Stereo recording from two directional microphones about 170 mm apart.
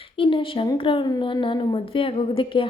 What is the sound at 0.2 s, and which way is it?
A woman's voice, 30° left (ahead or behind).